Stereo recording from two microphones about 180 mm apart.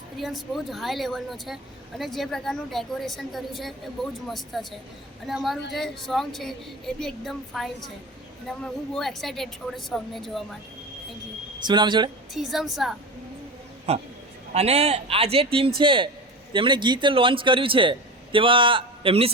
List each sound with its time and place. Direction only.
0.2 s a woman's voice: centre (ahead or behind)
11.6 s a man's voice: 25° right (ahead or behind)
12.3 s a woman's voice: centre (ahead or behind)
13.9 s a man's voice: 35° right (ahead or behind)